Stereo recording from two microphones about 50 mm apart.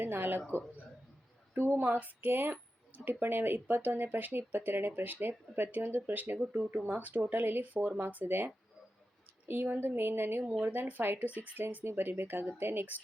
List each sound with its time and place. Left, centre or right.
0.0 s a woman's voice: right
1.5 s a woman's voice: right
6.3 s speech: right
9.7 s a woman's voice: right
11.9 s a woman's voice: right